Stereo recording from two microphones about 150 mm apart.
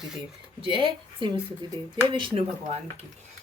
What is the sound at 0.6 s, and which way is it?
Speech, 35° right (ahead or behind).